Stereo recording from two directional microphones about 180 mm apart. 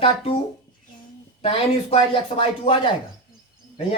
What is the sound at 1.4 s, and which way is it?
Speech, 30° left (ahead or behind).